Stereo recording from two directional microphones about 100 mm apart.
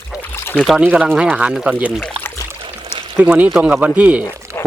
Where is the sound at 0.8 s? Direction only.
10° right (ahead or behind).